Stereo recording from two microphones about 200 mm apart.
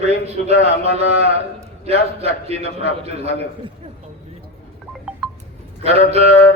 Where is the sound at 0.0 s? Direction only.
30° right (ahead or behind).